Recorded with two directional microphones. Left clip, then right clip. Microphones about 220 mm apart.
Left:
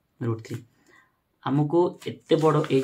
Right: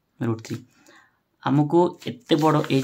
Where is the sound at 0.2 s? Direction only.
45° right (ahead or behind).